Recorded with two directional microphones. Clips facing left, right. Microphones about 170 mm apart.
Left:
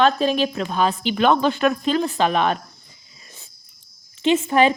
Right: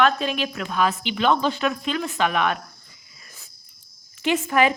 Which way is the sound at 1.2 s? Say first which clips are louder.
Left 3 dB; 55° left (ahead or behind).